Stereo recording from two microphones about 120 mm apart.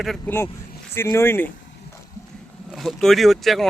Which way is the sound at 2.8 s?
Centre (ahead or behind).